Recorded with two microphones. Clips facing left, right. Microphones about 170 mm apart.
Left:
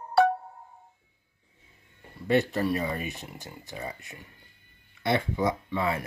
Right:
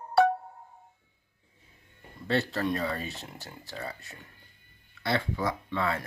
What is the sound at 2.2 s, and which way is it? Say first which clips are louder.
Speech: left 4 dB; 15° left (ahead or behind).